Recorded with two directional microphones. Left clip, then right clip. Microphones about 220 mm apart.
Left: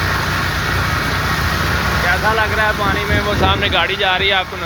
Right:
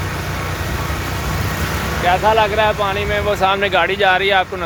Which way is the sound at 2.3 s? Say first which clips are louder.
Right 1 dB; 30° right (ahead or behind).